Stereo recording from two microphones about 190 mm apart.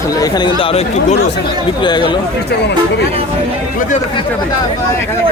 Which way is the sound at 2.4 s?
60° left (ahead or behind).